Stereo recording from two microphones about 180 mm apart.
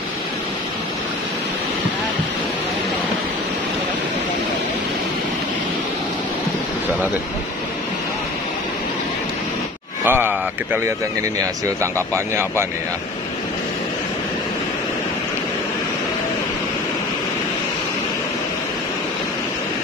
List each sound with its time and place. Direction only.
10.0 s speech: 10° right (ahead or behind)